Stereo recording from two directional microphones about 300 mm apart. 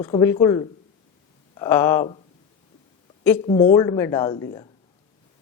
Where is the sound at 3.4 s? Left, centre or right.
Centre.